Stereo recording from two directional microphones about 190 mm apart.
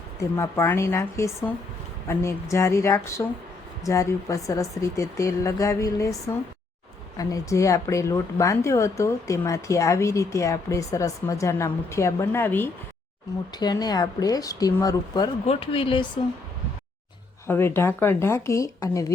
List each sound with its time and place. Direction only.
0.2 s speech: 15° left (ahead or behind)
17.4 s speech: 15° left (ahead or behind)